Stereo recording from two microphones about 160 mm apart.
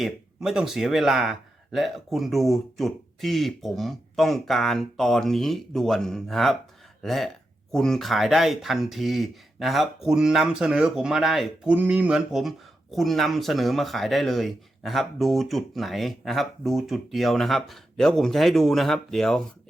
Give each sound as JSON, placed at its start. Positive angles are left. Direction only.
{"t": 0.0, "sound": "speech", "side_deg": 0}